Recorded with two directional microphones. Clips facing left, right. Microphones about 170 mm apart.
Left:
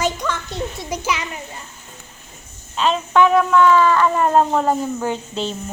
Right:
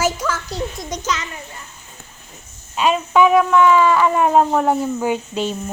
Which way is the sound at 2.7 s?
10° right (ahead or behind).